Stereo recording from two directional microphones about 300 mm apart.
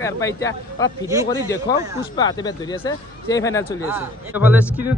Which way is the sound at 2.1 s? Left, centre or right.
Centre.